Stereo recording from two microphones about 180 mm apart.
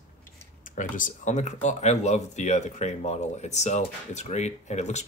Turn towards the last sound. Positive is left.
turn(degrees=40)  # may be behind; listen again after turning